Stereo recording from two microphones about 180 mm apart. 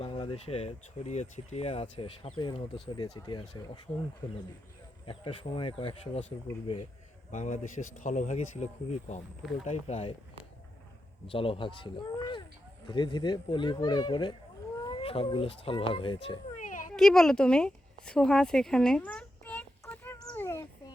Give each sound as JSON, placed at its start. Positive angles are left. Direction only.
{"t": 0.0, "sound": "speech", "side_deg": 30}
{"t": 5.0, "sound": "speech", "side_deg": 30}
{"t": 7.3, "sound": "speech", "side_deg": 40}
{"t": 11.3, "sound": "speech", "side_deg": 30}
{"t": 16.6, "sound": "a sound", "side_deg": 45}
{"t": 16.9, "sound": "a sound", "side_deg": 5}